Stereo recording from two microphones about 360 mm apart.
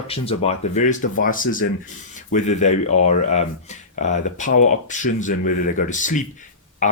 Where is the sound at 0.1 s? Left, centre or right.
Centre.